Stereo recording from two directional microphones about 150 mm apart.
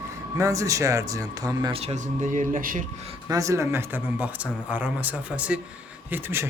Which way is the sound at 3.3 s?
20° right (ahead or behind).